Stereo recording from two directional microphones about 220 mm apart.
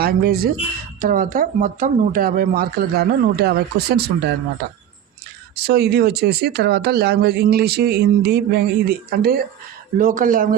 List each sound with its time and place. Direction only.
0.0 s speech: 45° right (ahead or behind)
5.6 s speech: 45° right (ahead or behind)